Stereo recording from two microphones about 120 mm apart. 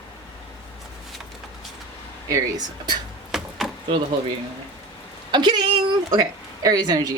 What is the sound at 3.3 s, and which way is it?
Chopping, centre (ahead or behind).